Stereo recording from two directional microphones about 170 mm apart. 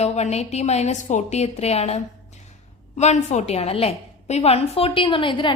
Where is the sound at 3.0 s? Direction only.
40° left (ahead or behind).